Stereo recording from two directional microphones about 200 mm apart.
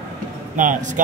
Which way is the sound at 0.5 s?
40° right (ahead or behind).